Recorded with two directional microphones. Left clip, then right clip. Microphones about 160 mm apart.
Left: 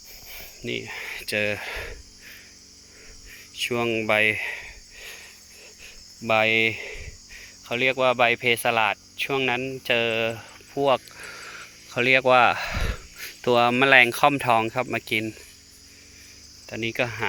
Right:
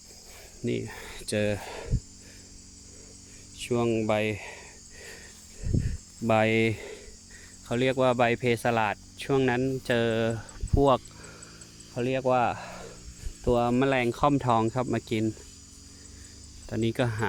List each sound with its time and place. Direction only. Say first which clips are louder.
0.3 s a sound: left 1 dB; 20° right (ahead or behind)
3.5 s speech: left 3 dB; 5° right (ahead or behind)
4.9 s a sound: left 4 dB; 25° right (ahead or behind)
5.8 s cricket: left 4 dB; 20° right (ahead or behind)
11.9 s speech: left 8 dB; 15° left (ahead or behind); by 15.3 s 15° right (ahead or behind)
16.6 s cricket: left 2 dB; 20° right (ahead or behind)